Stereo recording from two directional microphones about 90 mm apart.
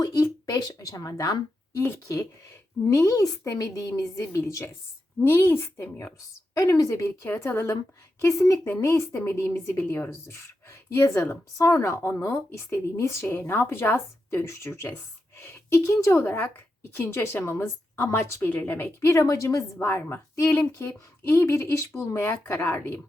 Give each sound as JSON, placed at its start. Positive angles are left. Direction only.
{"t": 0.0, "sound": "a woman's voice", "side_deg": 45}
{"t": 19.8, "sound": "a woman's voice", "side_deg": 25}